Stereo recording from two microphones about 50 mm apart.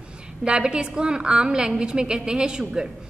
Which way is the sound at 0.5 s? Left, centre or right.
Centre.